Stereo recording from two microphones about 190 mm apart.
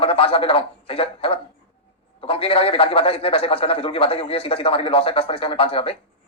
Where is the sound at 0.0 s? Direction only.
30° left (ahead or behind).